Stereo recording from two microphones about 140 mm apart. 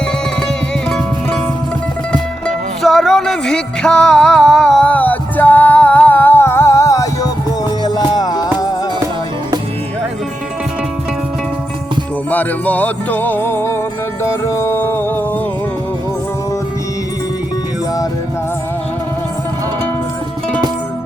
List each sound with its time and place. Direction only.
0.4 s music: 5° left (ahead or behind)
2.8 s music: centre (ahead or behind); by 8.4 s 30° left (ahead or behind)
12.3 s music: 10° left (ahead or behind)